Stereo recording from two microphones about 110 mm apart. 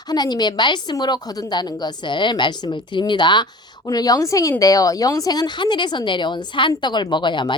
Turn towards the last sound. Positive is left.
turn(degrees=45)  # may be behind; listen again after turning